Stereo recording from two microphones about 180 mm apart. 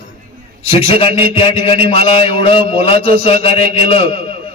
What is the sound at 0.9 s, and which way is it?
A man's voice, 30° left (ahead or behind).